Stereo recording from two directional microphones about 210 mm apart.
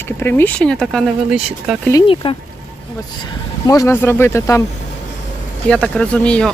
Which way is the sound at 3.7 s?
15° left (ahead or behind).